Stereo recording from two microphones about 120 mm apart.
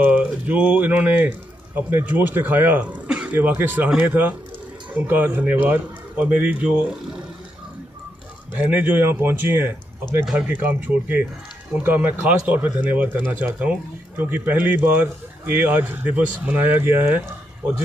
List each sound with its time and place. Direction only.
0.0 s speech: 10° right (ahead or behind)
8.5 s speech: 15° right (ahead or behind)